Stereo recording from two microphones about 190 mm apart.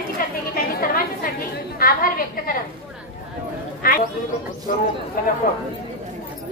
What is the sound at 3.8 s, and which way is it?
Speech, 50° left (ahead or behind).